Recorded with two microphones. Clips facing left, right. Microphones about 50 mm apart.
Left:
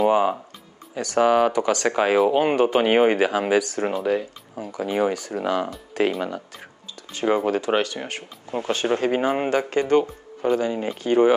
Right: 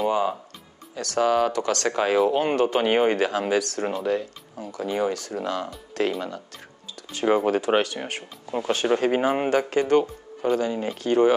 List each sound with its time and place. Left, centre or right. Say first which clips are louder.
0.1 s speech: left 4 dB; left
7.0 s speech: even; centre